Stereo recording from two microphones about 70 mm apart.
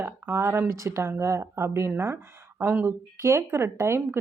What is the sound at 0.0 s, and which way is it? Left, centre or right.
Speech, right.